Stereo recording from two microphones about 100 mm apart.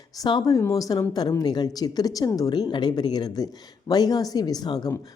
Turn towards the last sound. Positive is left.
turn(degrees=45)  # may be behind; listen again after turning